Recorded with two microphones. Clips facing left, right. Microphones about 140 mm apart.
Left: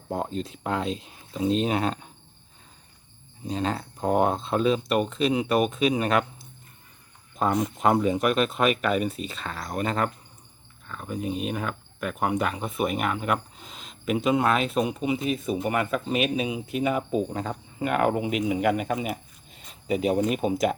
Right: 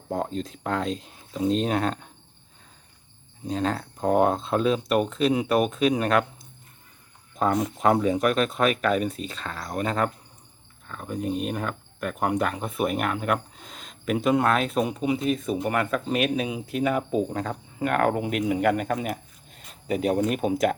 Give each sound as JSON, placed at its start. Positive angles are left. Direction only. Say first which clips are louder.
{"t": 0.1, "sound": "speech", "louder": "right 1 dB", "side_deg": 5}
{"t": 3.4, "sound": "speech", "louder": "right 1 dB", "side_deg": 0}